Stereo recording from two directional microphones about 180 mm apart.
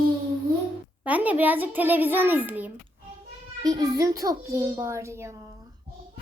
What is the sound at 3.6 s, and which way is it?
A child's voice, 20° right (ahead or behind).